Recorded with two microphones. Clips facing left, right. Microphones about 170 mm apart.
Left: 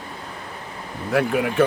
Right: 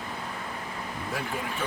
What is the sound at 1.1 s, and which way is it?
Speech, 70° left (ahead or behind).